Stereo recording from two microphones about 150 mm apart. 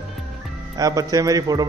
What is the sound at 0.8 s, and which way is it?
Speech, 25° right (ahead or behind).